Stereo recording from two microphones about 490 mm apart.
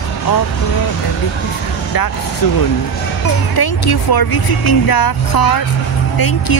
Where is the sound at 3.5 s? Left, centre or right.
Left.